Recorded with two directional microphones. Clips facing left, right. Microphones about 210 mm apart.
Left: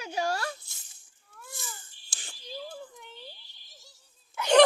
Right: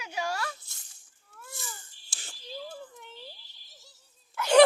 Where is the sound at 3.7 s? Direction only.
5° right (ahead or behind).